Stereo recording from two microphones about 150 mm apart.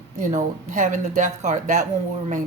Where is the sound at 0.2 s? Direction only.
55° right (ahead or behind).